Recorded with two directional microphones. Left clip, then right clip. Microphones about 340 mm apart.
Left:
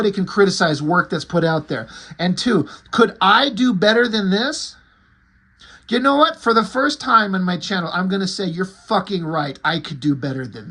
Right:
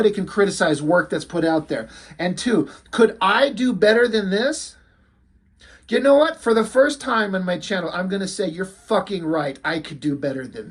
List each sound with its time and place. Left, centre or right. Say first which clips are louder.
0.0 s speech: left 2 dB; centre
5.9 s speech: even; centre